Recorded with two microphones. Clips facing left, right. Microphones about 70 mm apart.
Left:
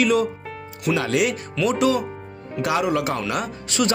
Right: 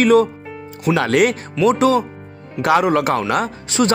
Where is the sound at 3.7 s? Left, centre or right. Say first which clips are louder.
Right 5 dB; right.